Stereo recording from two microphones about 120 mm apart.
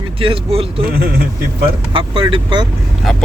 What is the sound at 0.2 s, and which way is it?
Speech, 50° right (ahead or behind).